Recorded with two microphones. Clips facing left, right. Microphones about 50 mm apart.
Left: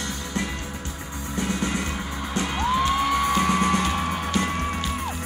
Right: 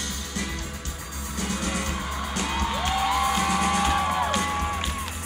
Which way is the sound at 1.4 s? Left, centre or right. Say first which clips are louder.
Left 3 dB; left.